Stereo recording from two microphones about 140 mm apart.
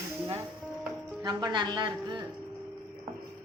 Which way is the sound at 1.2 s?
30° right (ahead or behind).